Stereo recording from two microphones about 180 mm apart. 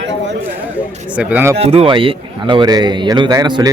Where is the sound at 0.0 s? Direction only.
80° right.